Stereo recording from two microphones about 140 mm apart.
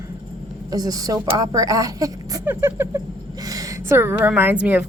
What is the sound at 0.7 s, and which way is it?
Speech, 25° right (ahead or behind).